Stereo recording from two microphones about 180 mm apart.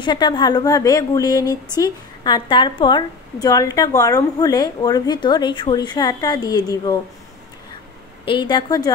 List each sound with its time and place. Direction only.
0.0 s a woman's voice: 25° left (ahead or behind)
8.3 s a woman's voice: 25° left (ahead or behind)